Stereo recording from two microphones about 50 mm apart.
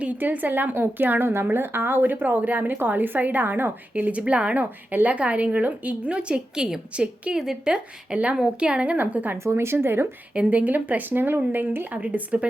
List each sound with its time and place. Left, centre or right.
0.0 s a woman's voice: right
3.9 s a woman's voice: right
9.4 s speech: right
9.8 s a woman's voice: right
10.3 s a woman's voice: right
11.9 s a woman's voice: right